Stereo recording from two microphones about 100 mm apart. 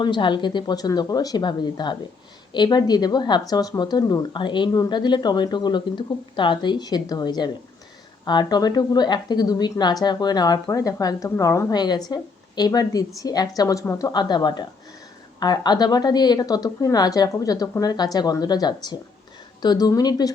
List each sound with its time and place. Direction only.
0.0 s speech: 50° left (ahead or behind); by 11.7 s 30° left (ahead or behind)
11.7 s a woman's voice: 45° left (ahead or behind); by 14.1 s 30° left (ahead or behind)
14.1 s a woman's voice: 45° left (ahead or behind)